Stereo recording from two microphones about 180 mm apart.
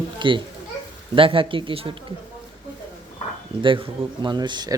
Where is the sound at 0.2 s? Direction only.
30° right (ahead or behind).